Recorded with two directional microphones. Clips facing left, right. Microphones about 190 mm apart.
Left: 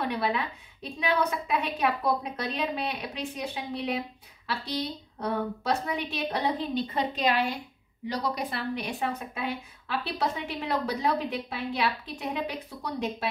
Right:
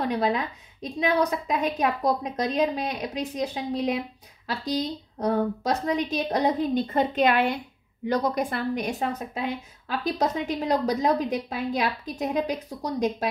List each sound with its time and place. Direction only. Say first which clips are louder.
0.0 s a woman's voice: right 4 dB; 35° right (ahead or behind)